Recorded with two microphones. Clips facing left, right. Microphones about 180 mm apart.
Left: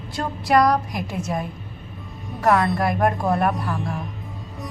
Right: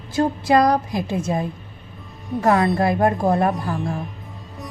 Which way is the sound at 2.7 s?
25° right (ahead or behind).